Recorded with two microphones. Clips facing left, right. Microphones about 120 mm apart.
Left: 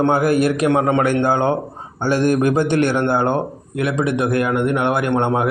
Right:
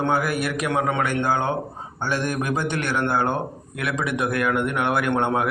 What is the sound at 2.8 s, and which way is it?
A man's voice, 25° left (ahead or behind).